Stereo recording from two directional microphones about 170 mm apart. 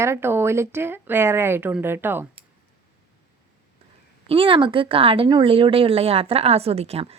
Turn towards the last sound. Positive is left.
turn(degrees=-35)  # may be behind; listen again after turning